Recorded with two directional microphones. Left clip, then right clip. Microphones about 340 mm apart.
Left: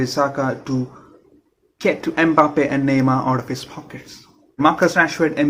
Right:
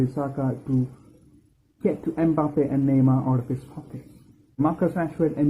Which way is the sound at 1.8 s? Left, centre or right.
Centre.